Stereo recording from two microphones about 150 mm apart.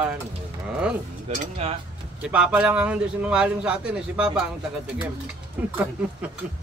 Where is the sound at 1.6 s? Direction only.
45° right (ahead or behind).